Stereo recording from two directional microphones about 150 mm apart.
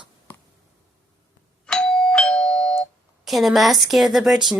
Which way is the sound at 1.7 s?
5° left (ahead or behind).